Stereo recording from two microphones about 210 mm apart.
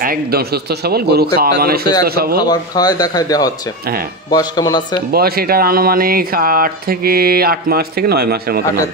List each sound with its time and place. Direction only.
0.0 s speech: 45° right (ahead or behind)
2.4 s speech: 20° left (ahead or behind)
5.1 s speech: 45° right (ahead or behind)